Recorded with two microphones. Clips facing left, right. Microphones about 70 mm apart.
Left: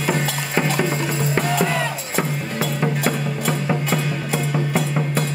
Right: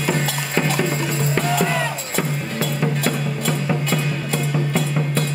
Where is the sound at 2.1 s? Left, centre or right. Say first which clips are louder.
Even; centre.